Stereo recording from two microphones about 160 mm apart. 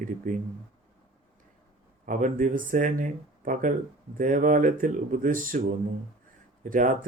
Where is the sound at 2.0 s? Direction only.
55° right (ahead or behind).